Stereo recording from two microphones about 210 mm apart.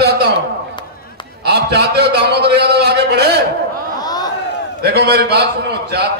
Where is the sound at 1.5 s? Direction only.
50° right (ahead or behind).